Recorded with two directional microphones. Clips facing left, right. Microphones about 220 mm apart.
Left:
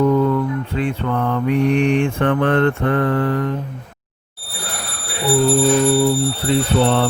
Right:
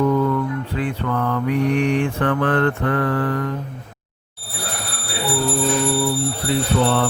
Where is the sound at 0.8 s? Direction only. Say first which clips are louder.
Left 2 dB; 25° left (ahead or behind).